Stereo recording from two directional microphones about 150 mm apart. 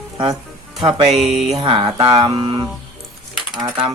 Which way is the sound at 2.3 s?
30° right (ahead or behind).